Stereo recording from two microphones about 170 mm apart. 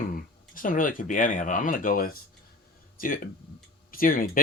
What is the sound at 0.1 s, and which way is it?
Speech, 55° left (ahead or behind).